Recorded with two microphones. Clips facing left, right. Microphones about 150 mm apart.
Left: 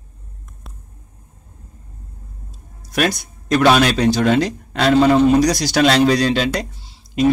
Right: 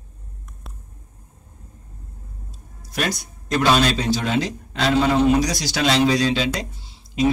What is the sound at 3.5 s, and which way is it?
A man's voice, 70° left (ahead or behind).